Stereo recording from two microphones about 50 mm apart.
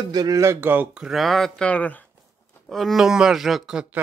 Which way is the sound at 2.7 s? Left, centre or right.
Centre.